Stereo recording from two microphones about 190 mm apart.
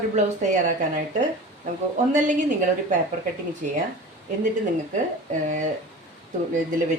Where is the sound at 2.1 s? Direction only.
40° right (ahead or behind).